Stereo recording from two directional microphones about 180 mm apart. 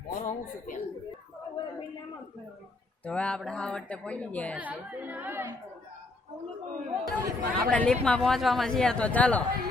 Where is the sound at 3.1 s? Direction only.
5° left (ahead or behind).